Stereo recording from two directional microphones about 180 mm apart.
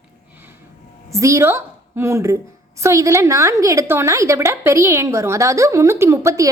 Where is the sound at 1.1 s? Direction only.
15° right (ahead or behind).